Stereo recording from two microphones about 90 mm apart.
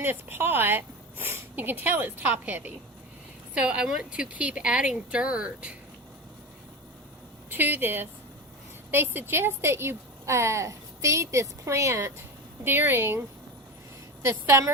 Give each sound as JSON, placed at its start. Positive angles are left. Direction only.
{"t": 0.0, "sound": "a woman's voice", "side_deg": -25}
{"t": 7.5, "sound": "a woman's voice", "side_deg": -20}